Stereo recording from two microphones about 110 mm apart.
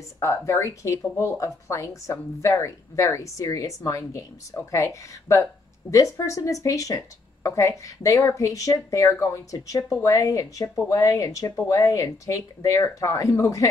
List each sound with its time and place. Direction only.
0.2 s a woman's voice: 25° left (ahead or behind)